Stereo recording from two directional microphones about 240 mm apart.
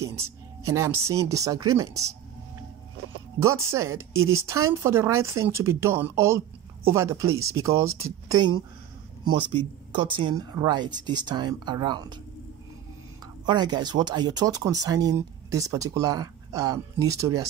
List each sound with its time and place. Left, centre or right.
0.0 s speech: centre
3.3 s speech: centre
4.1 s speech: right
4.8 s speech: centre
7.2 s speech: right
7.5 s speech: centre
9.9 s speech: centre
13.5 s speech: centre